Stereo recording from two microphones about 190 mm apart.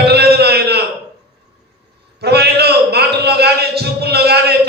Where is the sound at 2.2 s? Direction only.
60° right (ahead or behind).